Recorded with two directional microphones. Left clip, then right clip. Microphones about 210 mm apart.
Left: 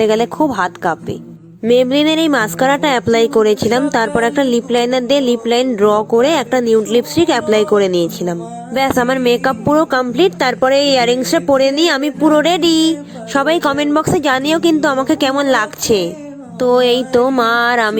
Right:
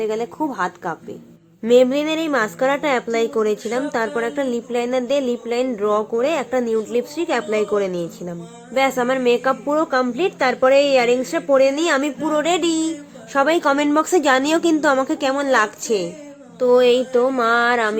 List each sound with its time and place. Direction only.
0.0 s music: 45° left (ahead or behind)
1.6 s a woman's voice: 35° left (ahead or behind)
16.6 s music: 45° left (ahead or behind)